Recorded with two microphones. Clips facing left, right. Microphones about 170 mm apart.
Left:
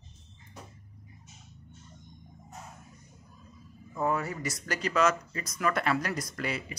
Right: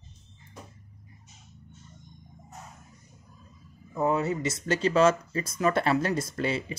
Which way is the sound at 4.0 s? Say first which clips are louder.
Right 4 dB; 20° right (ahead or behind).